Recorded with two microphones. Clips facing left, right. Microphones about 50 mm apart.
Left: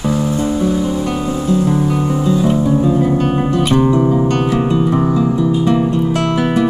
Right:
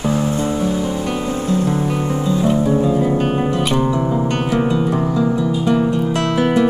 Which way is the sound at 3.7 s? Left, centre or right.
Centre.